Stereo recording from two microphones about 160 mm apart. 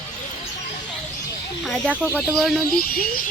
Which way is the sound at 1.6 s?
5° left (ahead or behind).